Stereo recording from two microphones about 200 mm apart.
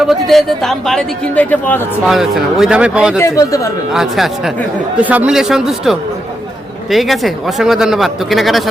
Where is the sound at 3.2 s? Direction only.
15° left (ahead or behind).